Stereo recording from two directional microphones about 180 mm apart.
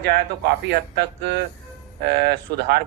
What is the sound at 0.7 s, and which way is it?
Speech, 65° right (ahead or behind).